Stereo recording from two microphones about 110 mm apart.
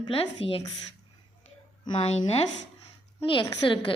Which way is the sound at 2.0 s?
65° left (ahead or behind).